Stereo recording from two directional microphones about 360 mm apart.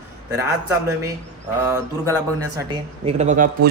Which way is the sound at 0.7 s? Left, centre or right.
Centre.